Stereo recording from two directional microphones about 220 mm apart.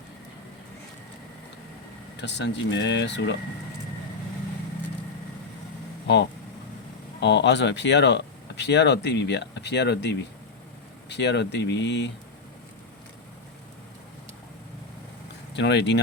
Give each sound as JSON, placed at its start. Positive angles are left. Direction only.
{"t": 2.1, "sound": "speech", "side_deg": 50}
{"t": 7.2, "sound": "speech", "side_deg": 55}
{"t": 15.5, "sound": "speech", "side_deg": 50}